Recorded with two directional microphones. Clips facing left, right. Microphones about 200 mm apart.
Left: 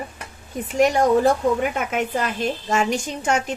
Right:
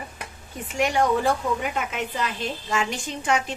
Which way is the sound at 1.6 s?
50° left (ahead or behind).